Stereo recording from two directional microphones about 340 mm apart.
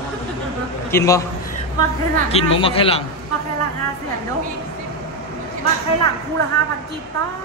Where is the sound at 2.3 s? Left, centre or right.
Centre.